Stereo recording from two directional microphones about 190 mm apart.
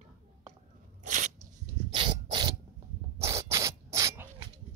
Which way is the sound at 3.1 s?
15° right (ahead or behind).